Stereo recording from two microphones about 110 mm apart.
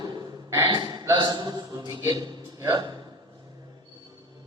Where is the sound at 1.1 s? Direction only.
45° right (ahead or behind).